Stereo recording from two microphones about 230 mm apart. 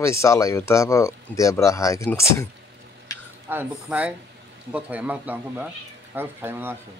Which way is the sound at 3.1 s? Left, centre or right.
Centre.